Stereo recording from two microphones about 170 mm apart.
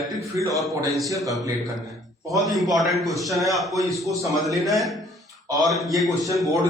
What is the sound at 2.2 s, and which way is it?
Speech, 20° right (ahead or behind).